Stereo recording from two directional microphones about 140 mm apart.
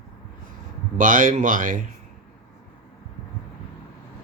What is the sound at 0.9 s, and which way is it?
Speech, 70° right (ahead or behind).